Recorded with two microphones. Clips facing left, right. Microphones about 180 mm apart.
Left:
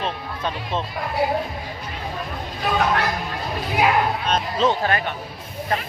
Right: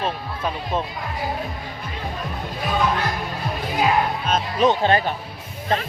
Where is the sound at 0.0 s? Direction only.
5° right (ahead or behind).